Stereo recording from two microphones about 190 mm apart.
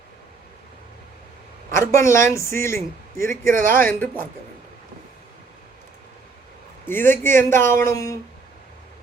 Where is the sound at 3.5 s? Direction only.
45° right (ahead or behind).